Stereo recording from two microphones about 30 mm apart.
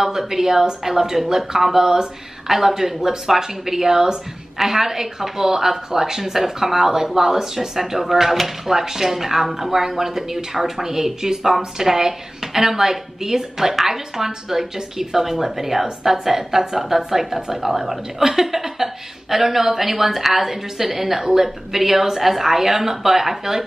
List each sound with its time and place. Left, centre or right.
0.2 s a woman's voice: centre
2.4 s a woman's voice: centre